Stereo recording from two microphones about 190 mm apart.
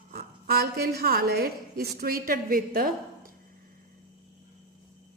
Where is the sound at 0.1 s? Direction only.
55° right (ahead or behind).